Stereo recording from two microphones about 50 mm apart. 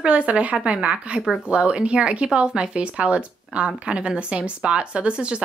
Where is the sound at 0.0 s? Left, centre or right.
Right.